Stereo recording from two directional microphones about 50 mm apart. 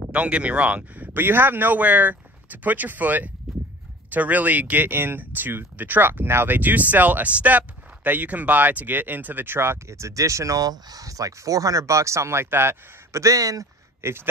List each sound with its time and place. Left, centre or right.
0.1 s speech: right
1.1 s speech: right
3.5 s horse: centre
4.1 s speech: right
11.7 s speech: right
13.1 s speech: right
14.0 s a man's voice: right